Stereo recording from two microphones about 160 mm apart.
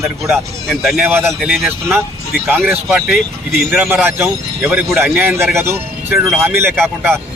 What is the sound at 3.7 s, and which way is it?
Speech, 15° right (ahead or behind).